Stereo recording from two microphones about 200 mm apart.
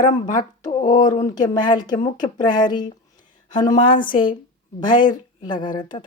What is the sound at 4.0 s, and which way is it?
Speech, 25° left (ahead or behind).